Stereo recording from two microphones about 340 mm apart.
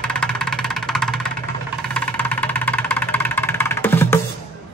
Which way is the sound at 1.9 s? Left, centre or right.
Centre.